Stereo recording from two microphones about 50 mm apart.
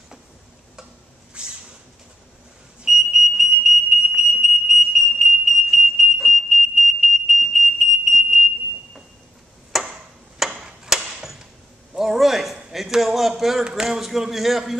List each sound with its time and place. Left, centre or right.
1.4 s a sound: centre
2.8 s smoke detector: centre
9.7 s ping: centre
10.5 s chop: centre
12.0 s a sound: centre
12.7 s a man's voice: centre